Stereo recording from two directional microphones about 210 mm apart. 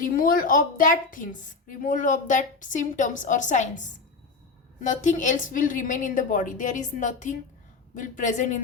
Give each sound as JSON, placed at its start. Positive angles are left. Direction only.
{"t": 0.0, "sound": "a woman's voice", "side_deg": 40}